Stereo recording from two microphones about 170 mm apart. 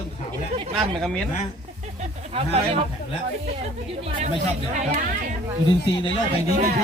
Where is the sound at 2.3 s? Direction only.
35° right (ahead or behind).